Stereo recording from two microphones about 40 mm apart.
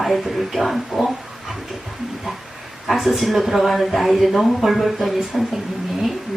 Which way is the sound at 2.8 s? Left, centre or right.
Centre.